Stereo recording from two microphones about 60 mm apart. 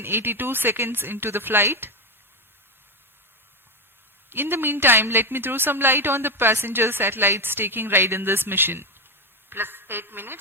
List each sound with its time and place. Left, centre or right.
0.0 s a woman's voice: right
4.3 s a woman's voice: right